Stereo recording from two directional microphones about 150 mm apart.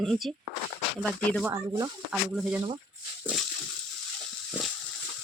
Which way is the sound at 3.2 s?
5° left (ahead or behind).